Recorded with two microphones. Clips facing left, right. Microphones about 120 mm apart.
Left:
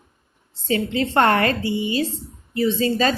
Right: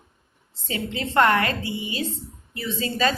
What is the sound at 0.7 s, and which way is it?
A woman's voice, 35° left (ahead or behind).